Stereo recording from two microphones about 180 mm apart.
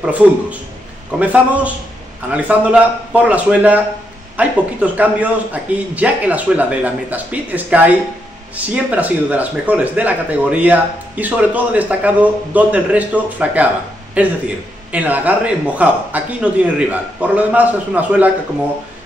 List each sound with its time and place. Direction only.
0.0 s speech: 5° right (ahead or behind)